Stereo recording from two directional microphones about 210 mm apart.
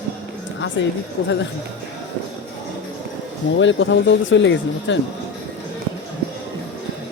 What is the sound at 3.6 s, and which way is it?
Speech, 60° left (ahead or behind).